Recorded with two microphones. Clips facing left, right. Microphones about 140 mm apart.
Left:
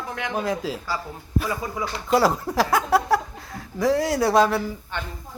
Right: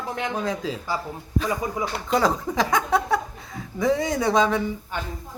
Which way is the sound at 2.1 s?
5° left (ahead or behind).